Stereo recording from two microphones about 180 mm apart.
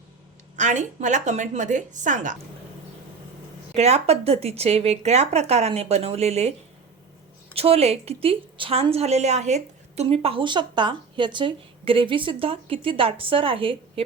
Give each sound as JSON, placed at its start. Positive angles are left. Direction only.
{"t": 0.5, "sound": "a woman's voice", "side_deg": -40}
{"t": 3.8, "sound": "speech", "side_deg": -35}
{"t": 7.5, "sound": "speech", "side_deg": -35}